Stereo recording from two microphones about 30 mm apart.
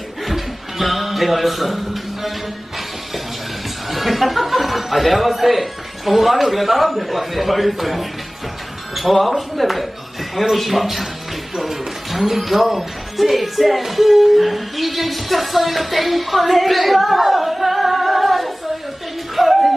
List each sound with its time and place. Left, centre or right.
0.3 s a sound: centre
3.8 s a man's voice: centre
19.4 s music: centre